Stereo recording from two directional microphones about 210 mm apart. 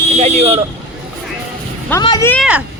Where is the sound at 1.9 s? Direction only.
15° left (ahead or behind).